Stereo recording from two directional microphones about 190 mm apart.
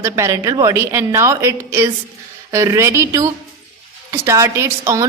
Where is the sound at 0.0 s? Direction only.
15° right (ahead or behind).